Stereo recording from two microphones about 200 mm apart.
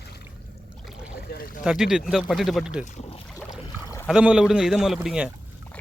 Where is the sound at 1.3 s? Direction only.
45° left (ahead or behind).